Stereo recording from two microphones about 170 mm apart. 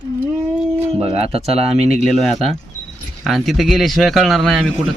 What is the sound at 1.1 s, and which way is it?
Speech, 35° right (ahead or behind).